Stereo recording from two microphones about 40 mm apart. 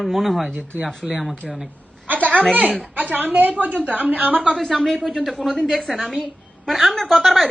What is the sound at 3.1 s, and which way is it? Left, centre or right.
Speech, right.